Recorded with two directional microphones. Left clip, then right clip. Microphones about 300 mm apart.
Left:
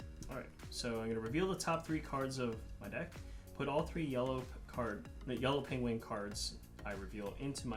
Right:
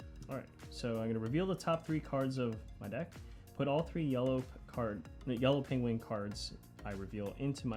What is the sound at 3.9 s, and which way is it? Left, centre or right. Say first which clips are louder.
Speech: right 3 dB; right.